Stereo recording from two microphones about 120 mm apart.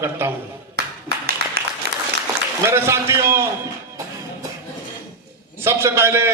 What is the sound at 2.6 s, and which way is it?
Speech, 20° right (ahead or behind).